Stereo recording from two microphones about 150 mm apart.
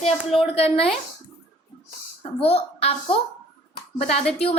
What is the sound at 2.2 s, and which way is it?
A woman's voice, 40° left (ahead or behind).